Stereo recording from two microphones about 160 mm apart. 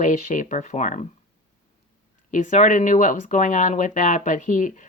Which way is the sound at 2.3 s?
50° left (ahead or behind).